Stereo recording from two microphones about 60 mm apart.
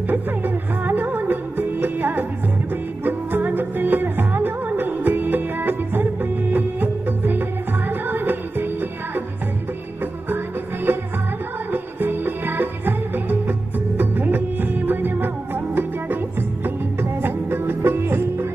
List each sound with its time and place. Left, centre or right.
0.1 s music: right
10.9 s music: right